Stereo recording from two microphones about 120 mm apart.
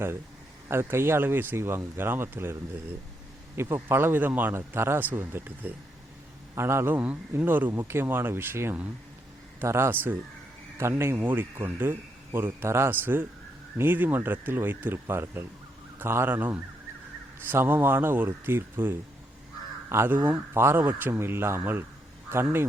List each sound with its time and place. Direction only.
0.7 s speech: 20° right (ahead or behind)